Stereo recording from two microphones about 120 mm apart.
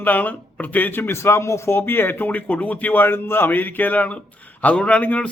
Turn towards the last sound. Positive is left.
turn(degrees=10)  # may be behind; listen again after turning